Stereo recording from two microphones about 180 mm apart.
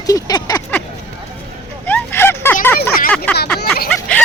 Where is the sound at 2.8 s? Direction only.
55° left (ahead or behind).